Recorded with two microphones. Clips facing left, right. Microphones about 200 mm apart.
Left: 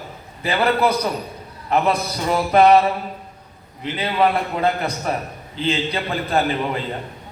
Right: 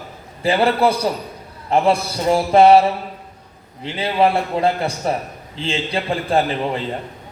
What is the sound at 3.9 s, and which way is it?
A man's voice, 30° right (ahead or behind).